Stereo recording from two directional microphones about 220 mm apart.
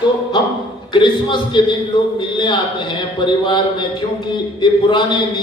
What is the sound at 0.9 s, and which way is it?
A man's voice, 20° left (ahead or behind).